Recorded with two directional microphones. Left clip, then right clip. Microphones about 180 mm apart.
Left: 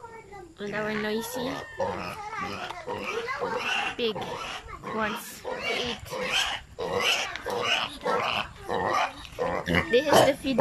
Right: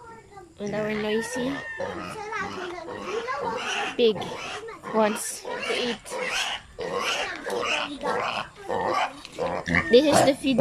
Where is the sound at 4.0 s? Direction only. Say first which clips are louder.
Right 7 dB; 20° right (ahead or behind).